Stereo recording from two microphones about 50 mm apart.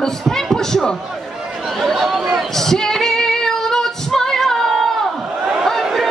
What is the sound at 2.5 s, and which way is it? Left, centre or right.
Female singing, centre.